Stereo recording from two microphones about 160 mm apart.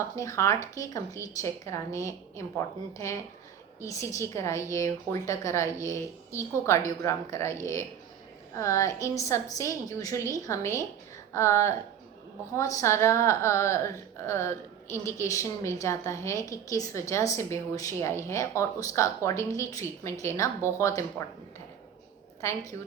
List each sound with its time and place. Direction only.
0.2 s a woman's voice: 20° left (ahead or behind)
22.4 s a woman's voice: 20° left (ahead or behind)